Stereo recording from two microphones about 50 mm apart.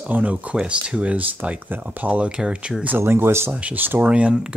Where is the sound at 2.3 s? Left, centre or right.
Centre.